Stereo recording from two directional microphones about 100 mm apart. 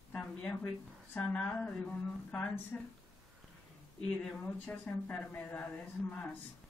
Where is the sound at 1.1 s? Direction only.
15° left (ahead or behind).